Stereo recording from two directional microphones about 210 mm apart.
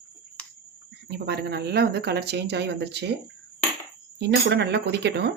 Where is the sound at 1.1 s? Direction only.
50° right (ahead or behind).